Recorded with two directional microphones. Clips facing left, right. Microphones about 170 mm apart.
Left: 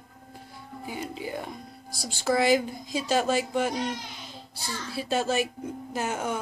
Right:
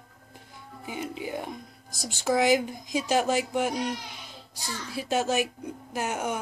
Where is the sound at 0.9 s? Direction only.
15° right (ahead or behind).